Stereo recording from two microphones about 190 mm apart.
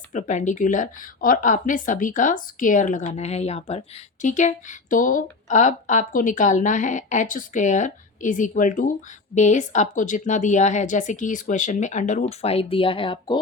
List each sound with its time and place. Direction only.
0.1 s speech: 40° left (ahead or behind)